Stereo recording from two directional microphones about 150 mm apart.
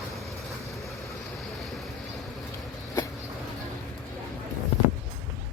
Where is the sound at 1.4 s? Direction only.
Centre (ahead or behind).